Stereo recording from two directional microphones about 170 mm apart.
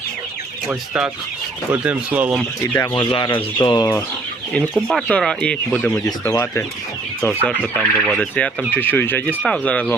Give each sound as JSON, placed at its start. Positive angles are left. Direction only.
{"t": 0.7, "sound": "speech", "side_deg": -5}
{"t": 2.9, "sound": "speech", "side_deg": 25}
{"t": 4.5, "sound": "speech", "side_deg": 0}
{"t": 6.1, "sound": "speech", "side_deg": 20}